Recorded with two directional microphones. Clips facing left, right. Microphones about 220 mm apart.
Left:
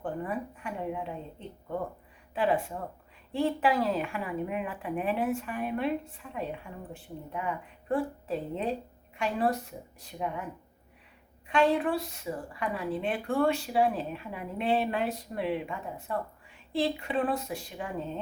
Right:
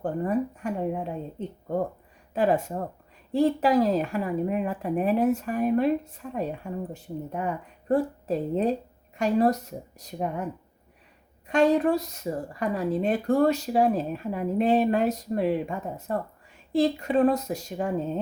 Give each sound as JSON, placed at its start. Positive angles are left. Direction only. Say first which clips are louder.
{"t": 0.0, "sound": "a woman's voice", "louder": "right 8 dB", "side_deg": -40}